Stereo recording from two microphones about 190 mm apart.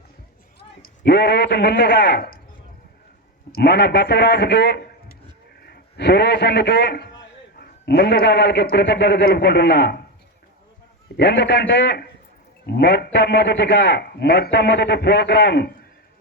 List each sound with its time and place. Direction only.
0.8 s a man's voice: 60° left (ahead or behind)
3.5 s a man's voice: 60° left (ahead or behind)
11.2 s a man's voice: 65° left (ahead or behind)